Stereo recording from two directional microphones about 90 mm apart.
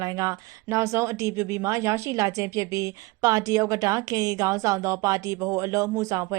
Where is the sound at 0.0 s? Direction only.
40° right (ahead or behind).